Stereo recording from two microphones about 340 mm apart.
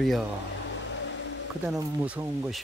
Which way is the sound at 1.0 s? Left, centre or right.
Left.